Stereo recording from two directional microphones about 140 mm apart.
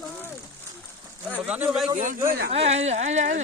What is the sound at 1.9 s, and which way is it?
Speech, 65° right (ahead or behind).